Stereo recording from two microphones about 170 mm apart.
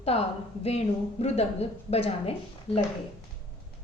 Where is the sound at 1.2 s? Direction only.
40° left (ahead or behind).